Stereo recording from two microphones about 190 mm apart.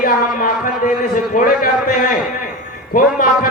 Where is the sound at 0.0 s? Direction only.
45° left (ahead or behind).